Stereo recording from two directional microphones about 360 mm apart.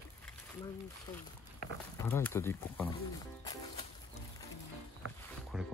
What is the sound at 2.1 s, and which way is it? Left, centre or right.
Speech, centre.